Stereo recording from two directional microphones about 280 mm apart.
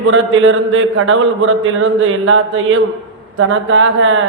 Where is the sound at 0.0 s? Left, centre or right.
Right.